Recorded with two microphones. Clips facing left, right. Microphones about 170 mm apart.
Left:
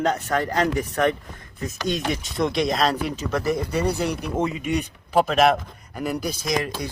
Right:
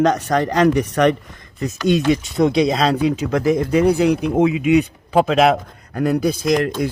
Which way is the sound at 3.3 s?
90° right.